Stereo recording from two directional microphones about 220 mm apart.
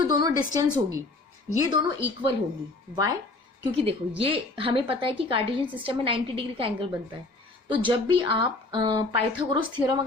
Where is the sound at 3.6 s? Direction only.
25° right (ahead or behind).